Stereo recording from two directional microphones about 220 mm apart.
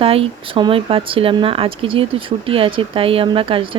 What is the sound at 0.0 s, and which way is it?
Speech, 25° right (ahead or behind).